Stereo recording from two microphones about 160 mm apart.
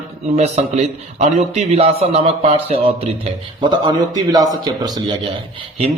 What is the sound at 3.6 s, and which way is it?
A man's voice, 30° right (ahead or behind).